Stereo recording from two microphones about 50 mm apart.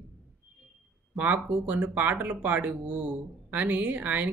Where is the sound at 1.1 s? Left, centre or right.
Right.